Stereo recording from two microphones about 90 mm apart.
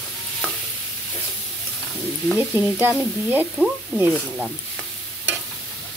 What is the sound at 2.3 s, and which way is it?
Stir, 20° right (ahead or behind).